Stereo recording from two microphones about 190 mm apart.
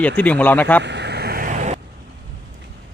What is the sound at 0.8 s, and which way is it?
Vehicle, 65° right (ahead or behind).